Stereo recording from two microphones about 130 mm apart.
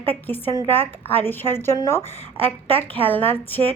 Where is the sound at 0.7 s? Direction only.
15° left (ahead or behind).